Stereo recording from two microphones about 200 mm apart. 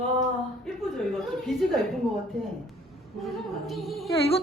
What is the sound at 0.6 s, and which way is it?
A woman's voice, centre (ahead or behind).